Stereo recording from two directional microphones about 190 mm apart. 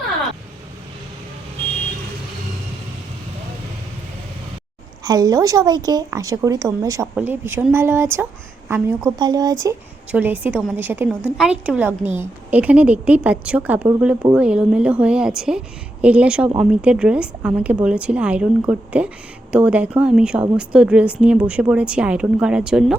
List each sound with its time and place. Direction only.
5.0 s a woman's voice: 20° right (ahead or behind); by 23.0 s 5° right (ahead or behind)